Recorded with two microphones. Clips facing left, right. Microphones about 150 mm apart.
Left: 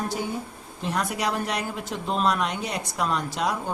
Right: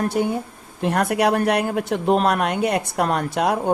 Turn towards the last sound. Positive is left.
turn(degrees=-60)  # may be behind; listen again after turning